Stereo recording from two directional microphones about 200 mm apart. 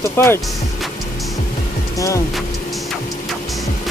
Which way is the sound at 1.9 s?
15° left (ahead or behind).